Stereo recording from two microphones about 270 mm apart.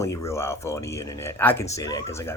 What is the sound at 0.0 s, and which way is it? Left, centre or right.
Speech, centre.